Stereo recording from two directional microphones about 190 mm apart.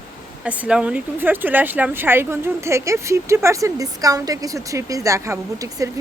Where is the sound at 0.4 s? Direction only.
5° right (ahead or behind).